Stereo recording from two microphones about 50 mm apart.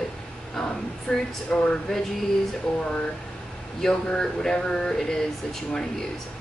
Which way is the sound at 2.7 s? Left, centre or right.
Centre.